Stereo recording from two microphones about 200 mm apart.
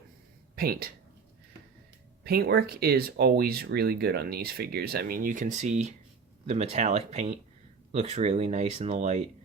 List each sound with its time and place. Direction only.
0.5 s speech: 50° right (ahead or behind)
2.2 s speech: 50° right (ahead or behind); by 9.2 s 35° right (ahead or behind)